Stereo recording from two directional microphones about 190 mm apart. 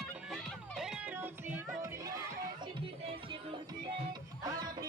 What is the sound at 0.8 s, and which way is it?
Music, 5° right (ahead or behind).